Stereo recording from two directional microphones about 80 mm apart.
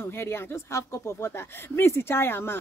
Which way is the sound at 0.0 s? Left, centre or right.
Left.